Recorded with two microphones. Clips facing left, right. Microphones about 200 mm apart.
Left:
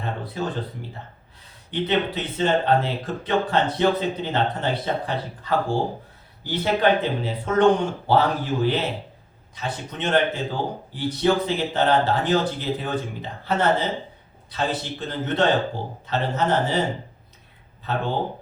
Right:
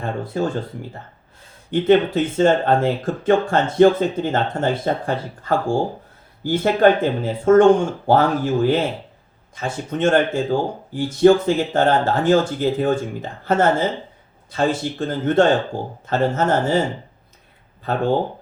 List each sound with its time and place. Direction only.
0.0 s speech: 50° right (ahead or behind)
1.7 s speech: 50° right (ahead or behind)